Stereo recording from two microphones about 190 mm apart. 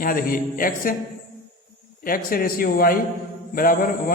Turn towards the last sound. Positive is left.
turn(degrees=50)  # may be behind; listen again after turning